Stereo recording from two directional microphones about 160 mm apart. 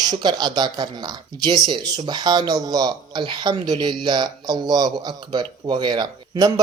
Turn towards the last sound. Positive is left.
turn(degrees=-25)  # may be behind; listen again after turning